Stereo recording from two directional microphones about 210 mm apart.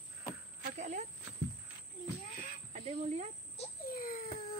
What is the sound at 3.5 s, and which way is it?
Wail, 40° left (ahead or behind).